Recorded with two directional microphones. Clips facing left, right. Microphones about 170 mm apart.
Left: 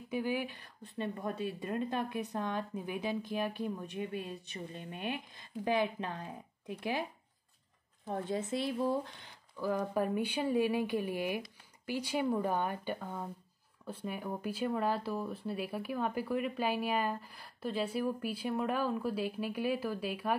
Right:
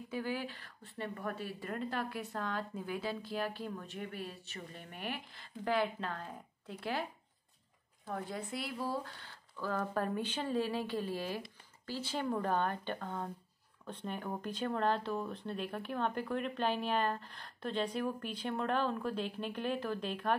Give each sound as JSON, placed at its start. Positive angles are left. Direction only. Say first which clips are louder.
{"t": 0.1, "sound": "speech", "louder": "left 4 dB", "side_deg": 15}